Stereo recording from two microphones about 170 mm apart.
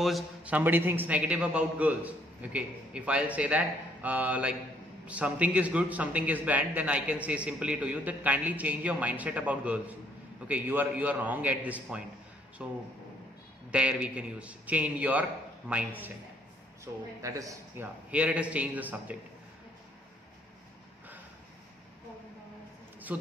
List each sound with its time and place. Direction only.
0.0 s a man's voice: 5° right (ahead or behind)
18.1 s a man's voice: 5° right (ahead or behind)